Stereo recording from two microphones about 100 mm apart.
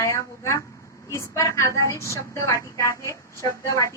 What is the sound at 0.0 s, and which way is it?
A woman's voice, 30° left (ahead or behind).